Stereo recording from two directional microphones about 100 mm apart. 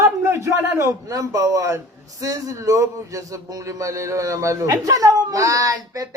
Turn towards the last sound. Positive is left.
turn(degrees=-35)  # may be behind; listen again after turning